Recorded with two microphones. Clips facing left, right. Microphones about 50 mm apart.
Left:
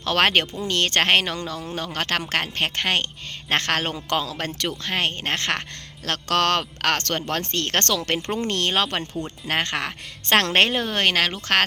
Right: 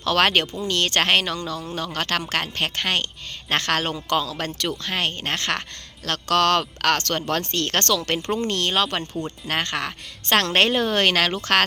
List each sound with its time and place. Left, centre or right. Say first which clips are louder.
0.0 s a man's voice: even; left
10.7 s a woman's voice: right 2 dB; centre